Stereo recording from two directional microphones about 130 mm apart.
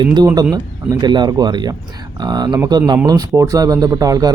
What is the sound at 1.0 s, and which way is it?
A man's voice, 35° right (ahead or behind).